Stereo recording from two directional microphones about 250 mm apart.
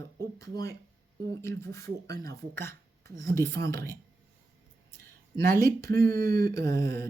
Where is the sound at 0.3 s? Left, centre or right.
Centre.